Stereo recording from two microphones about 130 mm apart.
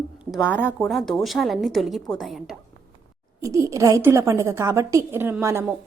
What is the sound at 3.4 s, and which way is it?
A woman's voice, 25° right (ahead or behind).